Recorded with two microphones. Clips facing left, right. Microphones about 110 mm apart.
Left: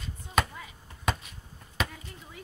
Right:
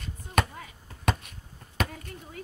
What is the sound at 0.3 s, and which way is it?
Basketball bounce, 55° right (ahead or behind).